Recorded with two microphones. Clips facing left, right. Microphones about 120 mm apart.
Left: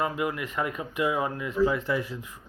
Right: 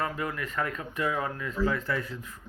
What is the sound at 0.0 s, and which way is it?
Speech, 15° left (ahead or behind).